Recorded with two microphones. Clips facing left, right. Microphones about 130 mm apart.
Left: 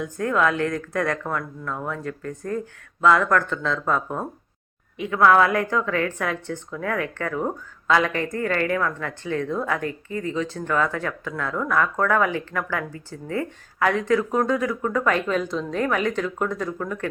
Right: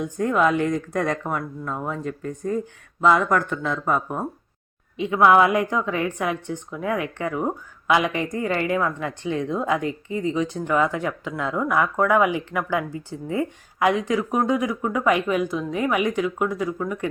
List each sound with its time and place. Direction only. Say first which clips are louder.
0.0 s a woman's voice: right 2 dB; 15° right (ahead or behind)